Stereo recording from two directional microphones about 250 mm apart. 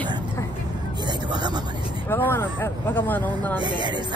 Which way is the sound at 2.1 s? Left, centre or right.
Centre.